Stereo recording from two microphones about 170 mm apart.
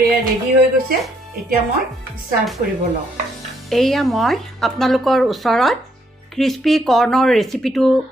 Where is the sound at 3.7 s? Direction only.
Centre (ahead or behind).